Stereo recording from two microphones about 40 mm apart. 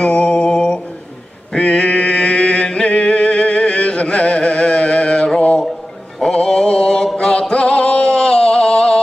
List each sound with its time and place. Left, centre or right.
0.0 s mantra: left
0.5 s mantra: left
1.5 s a sound: left
6.2 s mantra: centre
7.2 s music: left